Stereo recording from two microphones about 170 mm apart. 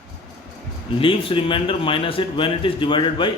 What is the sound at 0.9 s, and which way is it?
A man's voice, 30° left (ahead or behind).